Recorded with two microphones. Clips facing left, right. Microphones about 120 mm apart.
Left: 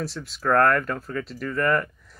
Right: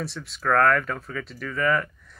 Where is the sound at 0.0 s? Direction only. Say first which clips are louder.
Left 1 dB; centre (ahead or behind).